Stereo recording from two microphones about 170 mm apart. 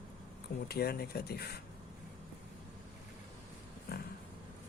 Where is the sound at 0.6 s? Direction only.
65° left (ahead or behind).